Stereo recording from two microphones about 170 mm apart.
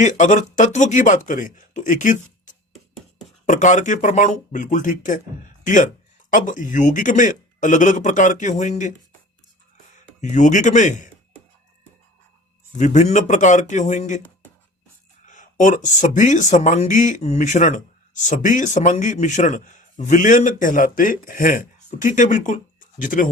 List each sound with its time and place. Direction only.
0.0 s speech: 45° left (ahead or behind)
10.2 s speech: 45° left (ahead or behind)
12.7 s speech: 45° left (ahead or behind)
15.3 s speech: 50° left (ahead or behind)